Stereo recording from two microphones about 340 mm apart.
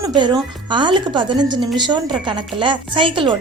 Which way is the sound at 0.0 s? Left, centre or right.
Centre.